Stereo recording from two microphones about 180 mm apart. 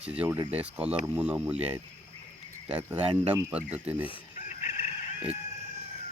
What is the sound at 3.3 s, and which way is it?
Speech, 10° right (ahead or behind).